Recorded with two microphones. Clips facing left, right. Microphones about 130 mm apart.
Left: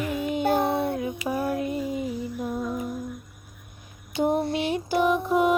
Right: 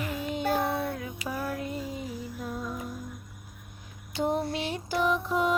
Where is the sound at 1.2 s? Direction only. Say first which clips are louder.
Left 5 dB; 20° left (ahead or behind).